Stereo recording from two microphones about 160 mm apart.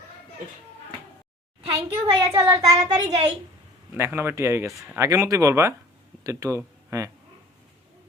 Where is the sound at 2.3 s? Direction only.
20° right (ahead or behind).